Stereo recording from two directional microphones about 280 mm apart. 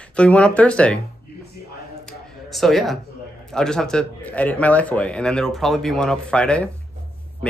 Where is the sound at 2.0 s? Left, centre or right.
Centre.